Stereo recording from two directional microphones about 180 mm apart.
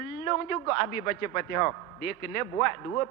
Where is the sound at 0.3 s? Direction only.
15° left (ahead or behind).